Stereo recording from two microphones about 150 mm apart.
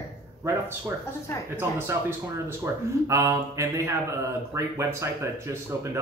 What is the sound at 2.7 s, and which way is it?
Speech, 15° right (ahead or behind).